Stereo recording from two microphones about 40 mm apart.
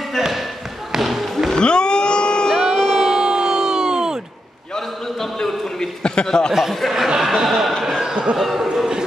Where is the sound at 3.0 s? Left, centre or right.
Centre.